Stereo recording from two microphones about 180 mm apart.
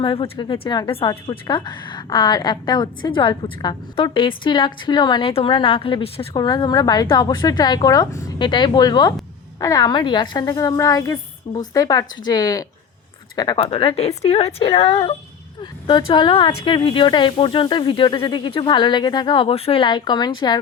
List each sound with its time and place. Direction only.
0.0 s a woman's voice: 30° left (ahead or behind)